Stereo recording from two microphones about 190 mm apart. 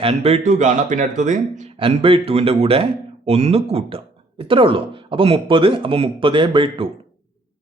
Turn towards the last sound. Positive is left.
turn(degrees=-25)  # may be behind; listen again after turning